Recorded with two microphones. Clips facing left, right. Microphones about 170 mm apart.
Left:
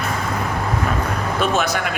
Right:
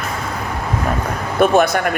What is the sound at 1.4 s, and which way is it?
Speech, 55° right (ahead or behind).